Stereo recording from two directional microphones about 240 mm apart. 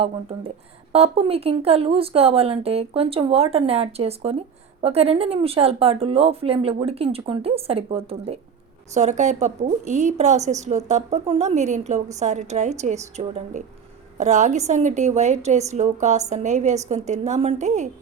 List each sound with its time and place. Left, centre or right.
0.0 s speech: right